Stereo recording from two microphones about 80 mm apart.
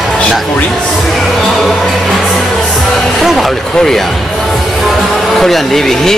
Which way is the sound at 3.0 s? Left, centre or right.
Centre.